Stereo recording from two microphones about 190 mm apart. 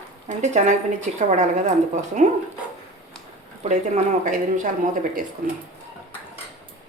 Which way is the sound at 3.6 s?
35° right (ahead or behind).